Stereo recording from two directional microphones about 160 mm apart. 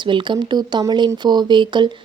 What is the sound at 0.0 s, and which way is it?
Speech, 30° right (ahead or behind).